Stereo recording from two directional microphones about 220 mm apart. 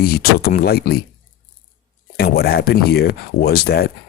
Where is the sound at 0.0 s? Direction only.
45° left (ahead or behind).